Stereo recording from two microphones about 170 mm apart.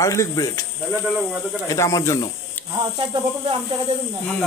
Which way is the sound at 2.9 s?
30° right (ahead or behind).